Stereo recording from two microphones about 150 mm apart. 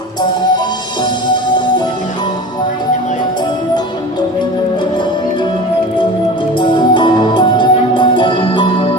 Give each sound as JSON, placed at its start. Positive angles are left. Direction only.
{"t": 6.6, "sound": "music", "side_deg": 30}